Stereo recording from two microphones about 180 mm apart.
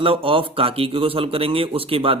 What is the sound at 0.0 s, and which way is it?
Speech, 30° right (ahead or behind).